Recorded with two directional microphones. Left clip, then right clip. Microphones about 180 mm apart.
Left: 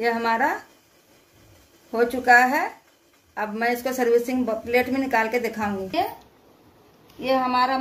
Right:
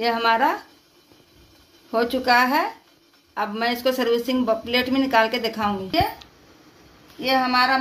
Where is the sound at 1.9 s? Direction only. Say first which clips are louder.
Left 2 dB; 45° right (ahead or behind).